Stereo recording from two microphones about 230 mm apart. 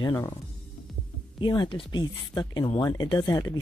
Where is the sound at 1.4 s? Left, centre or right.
Centre.